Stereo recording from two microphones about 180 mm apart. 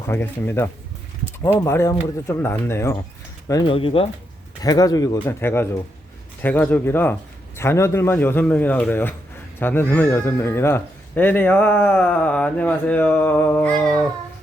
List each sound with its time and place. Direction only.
0.1 s speech: 10° left (ahead or behind)
3.5 s speech: 25° left (ahead or behind)
4.6 s speech: 20° left (ahead or behind)